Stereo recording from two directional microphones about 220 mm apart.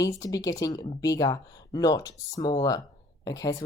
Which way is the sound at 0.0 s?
15° left (ahead or behind).